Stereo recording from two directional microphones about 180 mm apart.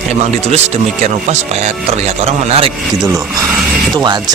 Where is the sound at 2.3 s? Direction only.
35° right (ahead or behind).